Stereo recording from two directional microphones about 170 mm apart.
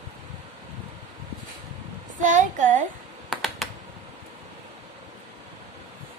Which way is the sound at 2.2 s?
50° right (ahead or behind).